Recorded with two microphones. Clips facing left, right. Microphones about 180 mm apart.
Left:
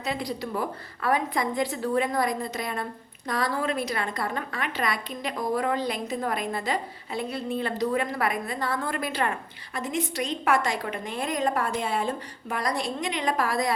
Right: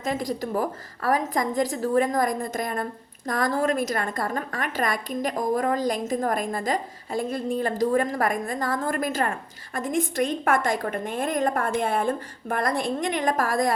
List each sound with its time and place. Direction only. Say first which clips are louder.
0.0 s a woman's voice: right 3 dB; 45° right (ahead or behind)